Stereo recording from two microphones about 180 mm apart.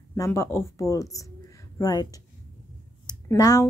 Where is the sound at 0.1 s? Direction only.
15° left (ahead or behind).